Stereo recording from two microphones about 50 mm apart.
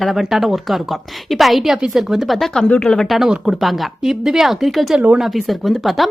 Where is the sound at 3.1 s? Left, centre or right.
Centre.